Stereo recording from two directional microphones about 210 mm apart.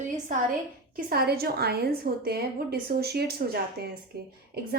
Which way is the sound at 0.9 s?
45° right (ahead or behind).